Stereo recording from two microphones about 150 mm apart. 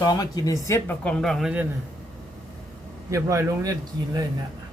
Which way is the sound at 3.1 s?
20° right (ahead or behind).